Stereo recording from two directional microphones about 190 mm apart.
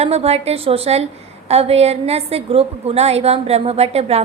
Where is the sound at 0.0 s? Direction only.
35° right (ahead or behind).